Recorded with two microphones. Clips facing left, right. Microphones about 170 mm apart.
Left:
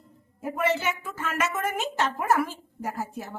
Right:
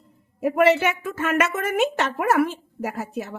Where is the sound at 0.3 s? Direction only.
70° right (ahead or behind).